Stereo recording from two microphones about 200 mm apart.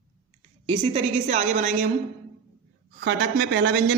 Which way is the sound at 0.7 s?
30° right (ahead or behind).